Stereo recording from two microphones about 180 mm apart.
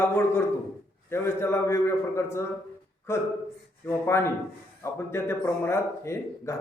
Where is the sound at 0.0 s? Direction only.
15° left (ahead or behind).